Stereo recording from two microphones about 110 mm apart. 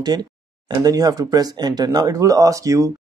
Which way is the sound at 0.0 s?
40° right (ahead or behind).